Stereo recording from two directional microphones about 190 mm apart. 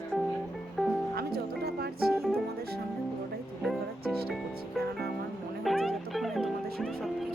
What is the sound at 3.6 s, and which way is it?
Music, centre (ahead or behind).